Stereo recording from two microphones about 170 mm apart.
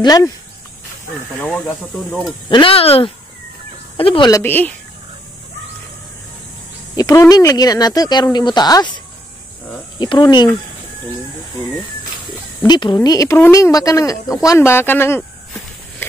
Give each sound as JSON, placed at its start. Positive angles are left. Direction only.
{"t": 0.0, "sound": "speech", "side_deg": 20}
{"t": 1.4, "sound": "speech", "side_deg": 10}
{"t": 2.5, "sound": "speech", "side_deg": 35}
{"t": 4.3, "sound": "speech", "side_deg": 10}
{"t": 7.0, "sound": "speech", "side_deg": 20}
{"t": 12.6, "sound": "speech", "side_deg": 25}